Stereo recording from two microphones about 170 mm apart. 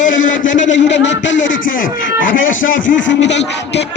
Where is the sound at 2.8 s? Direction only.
90° left.